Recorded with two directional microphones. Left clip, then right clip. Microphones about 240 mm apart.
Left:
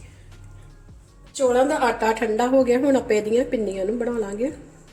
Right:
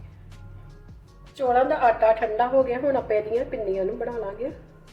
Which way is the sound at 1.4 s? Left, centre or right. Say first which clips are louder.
Left 1 dB; left.